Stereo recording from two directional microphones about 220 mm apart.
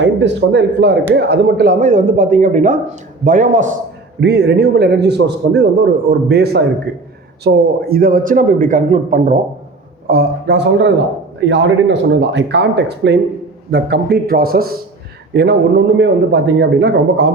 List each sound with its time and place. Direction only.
0.0 s a man's voice: 55° right (ahead or behind); by 3.8 s 35° right (ahead or behind)
4.2 s a man's voice: 50° right (ahead or behind)
10.1 s a man's voice: 45° right (ahead or behind)